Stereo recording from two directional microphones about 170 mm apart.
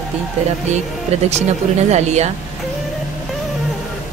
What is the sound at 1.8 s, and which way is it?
Speech, 40° right (ahead or behind).